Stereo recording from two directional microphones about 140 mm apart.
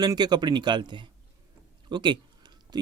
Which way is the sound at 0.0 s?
30° right (ahead or behind).